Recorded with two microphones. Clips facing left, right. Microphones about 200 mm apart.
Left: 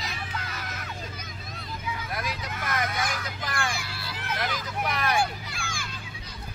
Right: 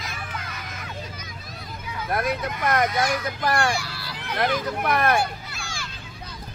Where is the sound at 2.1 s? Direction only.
55° right (ahead or behind).